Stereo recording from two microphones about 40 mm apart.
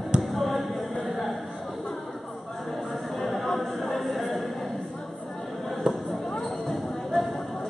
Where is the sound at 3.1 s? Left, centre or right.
Centre.